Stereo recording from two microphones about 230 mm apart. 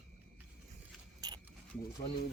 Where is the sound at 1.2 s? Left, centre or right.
Centre.